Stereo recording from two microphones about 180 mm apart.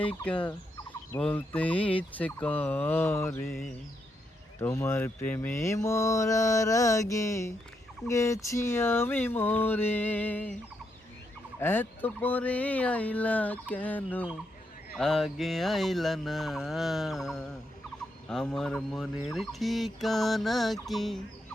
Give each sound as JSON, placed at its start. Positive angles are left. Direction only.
{"t": 0.0, "sound": "mantra", "side_deg": 5}
{"t": 4.6, "sound": "mantra", "side_deg": 15}
{"t": 11.6, "sound": "mantra", "side_deg": 10}
{"t": 14.9, "sound": "a sound", "side_deg": 0}